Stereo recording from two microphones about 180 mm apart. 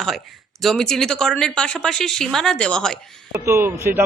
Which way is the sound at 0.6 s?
5° left (ahead or behind).